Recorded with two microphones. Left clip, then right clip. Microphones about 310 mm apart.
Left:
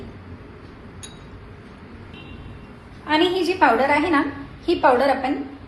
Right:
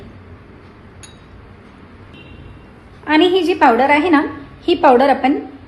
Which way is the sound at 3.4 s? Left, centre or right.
Right.